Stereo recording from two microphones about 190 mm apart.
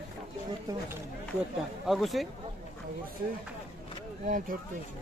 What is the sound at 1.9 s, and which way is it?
Speech, centre (ahead or behind).